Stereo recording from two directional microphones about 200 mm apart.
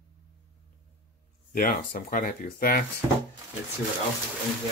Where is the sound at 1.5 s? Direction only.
45° left (ahead or behind).